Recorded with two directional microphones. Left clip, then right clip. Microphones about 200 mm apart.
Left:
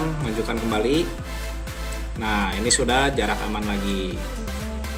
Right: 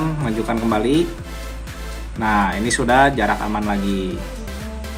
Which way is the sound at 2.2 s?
20° right (ahead or behind).